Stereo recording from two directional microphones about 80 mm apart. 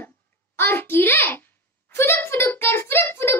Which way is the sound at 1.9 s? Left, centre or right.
Left.